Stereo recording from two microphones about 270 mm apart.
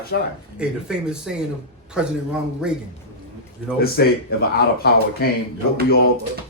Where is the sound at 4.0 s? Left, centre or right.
Left.